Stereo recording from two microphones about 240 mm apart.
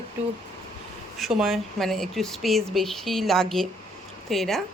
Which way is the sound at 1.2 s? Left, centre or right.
Centre.